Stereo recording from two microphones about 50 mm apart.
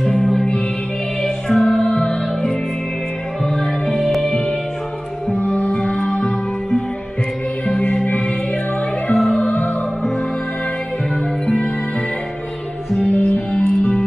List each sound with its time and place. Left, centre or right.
0.0 s music: centre
5.3 s music: left
5.9 s music: centre
7.6 s music: left
9.1 s music: centre
9.4 s music: left
13.0 s music: left